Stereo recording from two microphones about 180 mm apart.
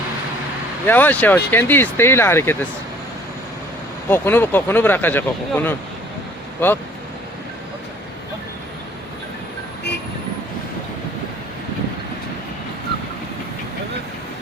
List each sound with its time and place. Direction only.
0.9 s speech: 10° left (ahead or behind)
4.1 s speech: 10° left (ahead or behind)